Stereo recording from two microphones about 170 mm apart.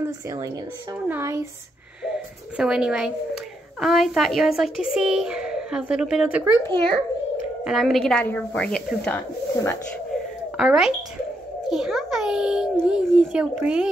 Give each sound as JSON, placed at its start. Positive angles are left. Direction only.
{"t": 1.0, "sound": "speech", "side_deg": -15}
{"t": 2.5, "sound": "a woman's voice", "side_deg": -5}
{"t": 7.6, "sound": "speech", "side_deg": 0}
{"t": 10.6, "sound": "a woman's voice", "side_deg": -5}
{"t": 11.7, "sound": "a sound", "side_deg": 0}
{"t": 12.8, "sound": "a woman's voice", "side_deg": -5}